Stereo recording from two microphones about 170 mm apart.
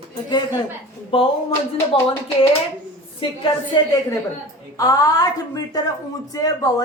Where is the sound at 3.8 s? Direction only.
25° left (ahead or behind).